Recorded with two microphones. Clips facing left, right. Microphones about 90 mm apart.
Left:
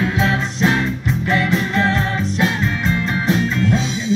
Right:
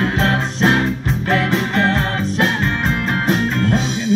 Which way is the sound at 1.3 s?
70° right (ahead or behind).